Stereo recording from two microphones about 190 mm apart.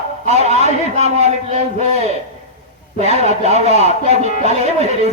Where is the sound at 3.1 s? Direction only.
35° right (ahead or behind).